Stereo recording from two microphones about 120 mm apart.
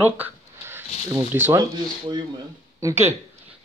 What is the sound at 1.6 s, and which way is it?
Speech, 35° right (ahead or behind).